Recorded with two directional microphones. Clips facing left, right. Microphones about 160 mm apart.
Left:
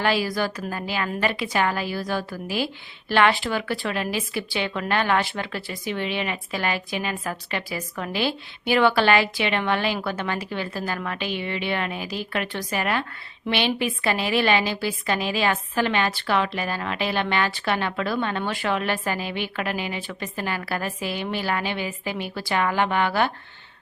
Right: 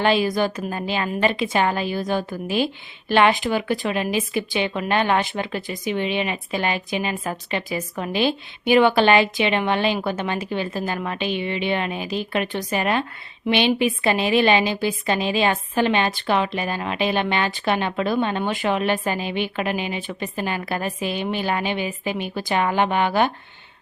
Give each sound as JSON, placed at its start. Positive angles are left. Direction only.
{"t": 0.0, "sound": "speech", "side_deg": -20}